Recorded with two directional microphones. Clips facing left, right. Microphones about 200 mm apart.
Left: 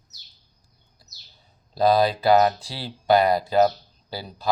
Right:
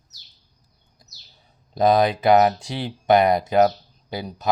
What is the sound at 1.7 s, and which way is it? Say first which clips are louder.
Speech: right 1 dB; 20° right (ahead or behind).